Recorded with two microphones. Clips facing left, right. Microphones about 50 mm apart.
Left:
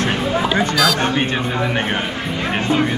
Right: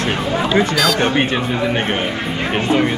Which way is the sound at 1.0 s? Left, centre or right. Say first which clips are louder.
Right 2 dB; right.